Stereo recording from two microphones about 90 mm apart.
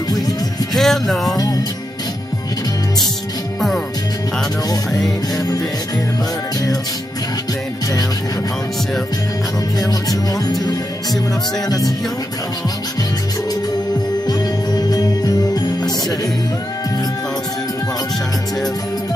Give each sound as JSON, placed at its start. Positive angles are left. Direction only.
{"t": 0.7, "sound": "music", "side_deg": 0}
{"t": 1.3, "sound": "music", "side_deg": 40}
{"t": 9.8, "sound": "music", "side_deg": 45}
{"t": 14.2, "sound": "jingle bell", "side_deg": 50}